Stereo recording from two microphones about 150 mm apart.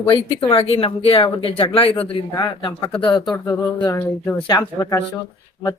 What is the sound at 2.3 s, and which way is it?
Speech, 25° left (ahead or behind).